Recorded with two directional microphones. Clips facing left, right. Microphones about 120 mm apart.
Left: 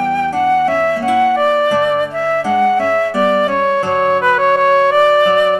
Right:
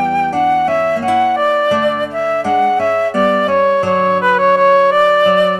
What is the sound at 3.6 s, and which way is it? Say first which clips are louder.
Music: right 2 dB; 20° right (ahead or behind).